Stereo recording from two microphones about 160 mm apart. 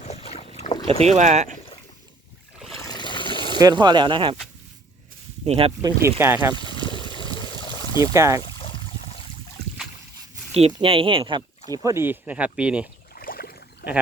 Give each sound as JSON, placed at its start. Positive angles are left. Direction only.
{"t": 0.0, "sound": "boat", "side_deg": 40}
{"t": 0.9, "sound": "speech", "side_deg": -40}
{"t": 2.8, "sound": "water", "side_deg": 25}
{"t": 3.6, "sound": "speech", "side_deg": -25}
{"t": 5.5, "sound": "speech", "side_deg": -35}
{"t": 5.8, "sound": "speech", "side_deg": -15}
{"t": 6.5, "sound": "trickle", "side_deg": 30}
{"t": 8.1, "sound": "speech", "side_deg": -20}
{"t": 8.5, "sound": "a sound", "side_deg": 30}
{"t": 10.7, "sound": "speech", "side_deg": -30}
{"t": 13.1, "sound": "boat", "side_deg": 65}